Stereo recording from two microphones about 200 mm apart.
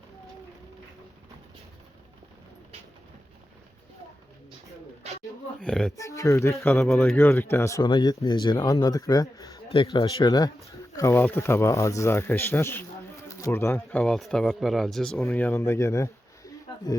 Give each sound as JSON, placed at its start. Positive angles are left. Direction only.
{"t": 5.5, "sound": "speech", "side_deg": 5}
{"t": 6.0, "sound": "speech", "side_deg": 15}
{"t": 6.7, "sound": "speech", "side_deg": 5}